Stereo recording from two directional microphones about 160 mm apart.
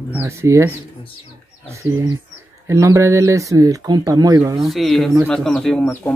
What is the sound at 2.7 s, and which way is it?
Speech, 20° right (ahead or behind).